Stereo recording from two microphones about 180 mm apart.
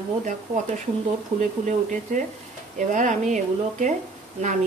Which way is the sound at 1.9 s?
45° right (ahead or behind).